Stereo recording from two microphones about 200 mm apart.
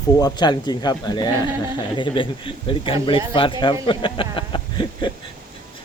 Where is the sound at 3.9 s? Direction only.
25° left (ahead or behind).